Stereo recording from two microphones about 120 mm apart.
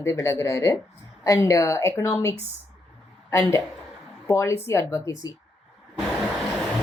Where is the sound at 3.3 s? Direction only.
20° left (ahead or behind).